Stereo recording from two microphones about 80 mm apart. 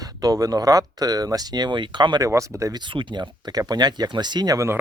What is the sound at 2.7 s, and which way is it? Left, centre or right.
Speech, right.